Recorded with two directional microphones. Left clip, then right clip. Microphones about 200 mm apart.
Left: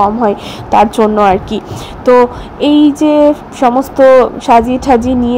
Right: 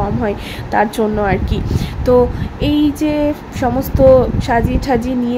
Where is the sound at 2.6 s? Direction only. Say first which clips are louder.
Left 7 dB; 15° left (ahead or behind).